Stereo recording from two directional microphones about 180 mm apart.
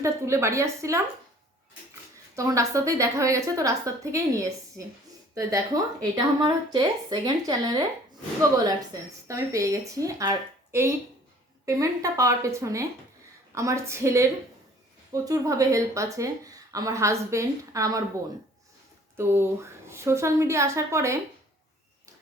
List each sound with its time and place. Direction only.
0.0 s a woman's voice: 15° right (ahead or behind)
2.3 s a woman's voice: 15° right (ahead or behind)
19.1 s a woman's voice: 15° right (ahead or behind)